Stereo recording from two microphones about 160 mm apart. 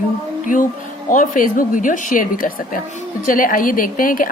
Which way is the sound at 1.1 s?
55° left (ahead or behind).